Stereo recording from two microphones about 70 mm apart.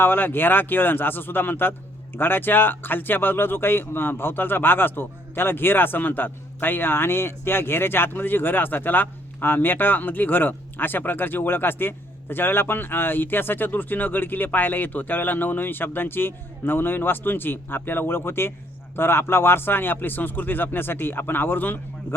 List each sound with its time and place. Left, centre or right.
0.0 s a man's voice: left